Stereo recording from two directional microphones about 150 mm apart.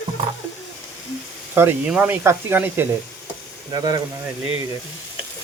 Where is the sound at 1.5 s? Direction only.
10° right (ahead or behind).